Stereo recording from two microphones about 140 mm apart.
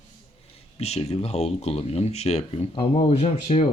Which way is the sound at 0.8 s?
50° left (ahead or behind).